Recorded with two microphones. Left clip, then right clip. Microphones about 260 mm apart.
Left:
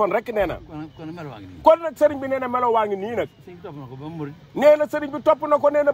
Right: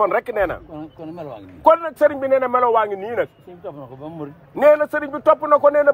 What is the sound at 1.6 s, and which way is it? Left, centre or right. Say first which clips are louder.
A man's voice: right 1 dB; left.